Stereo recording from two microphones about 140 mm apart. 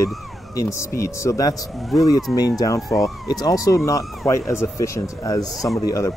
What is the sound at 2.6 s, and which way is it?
Speech, 25° left (ahead or behind).